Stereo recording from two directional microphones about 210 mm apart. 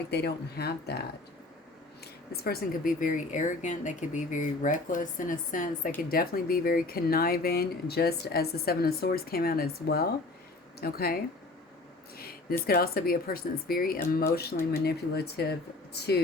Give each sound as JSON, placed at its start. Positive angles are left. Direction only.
{"t": 0.1, "sound": "speech", "side_deg": 50}
{"t": 2.3, "sound": "speech", "side_deg": 45}